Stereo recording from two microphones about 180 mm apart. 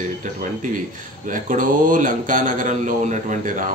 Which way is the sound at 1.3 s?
45° right (ahead or behind).